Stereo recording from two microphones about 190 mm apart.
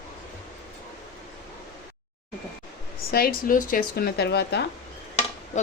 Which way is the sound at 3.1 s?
50° left (ahead or behind).